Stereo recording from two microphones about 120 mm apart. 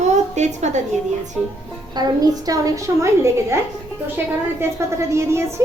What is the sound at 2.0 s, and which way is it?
A woman's voice, 35° right (ahead or behind).